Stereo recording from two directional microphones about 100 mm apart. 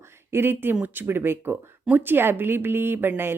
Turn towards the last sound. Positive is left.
turn(degrees=-20)  # may be behind; listen again after turning